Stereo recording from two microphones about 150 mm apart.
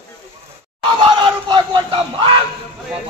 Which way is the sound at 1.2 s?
30° right (ahead or behind).